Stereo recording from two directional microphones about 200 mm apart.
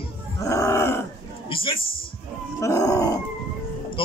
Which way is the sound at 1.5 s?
25° left (ahead or behind).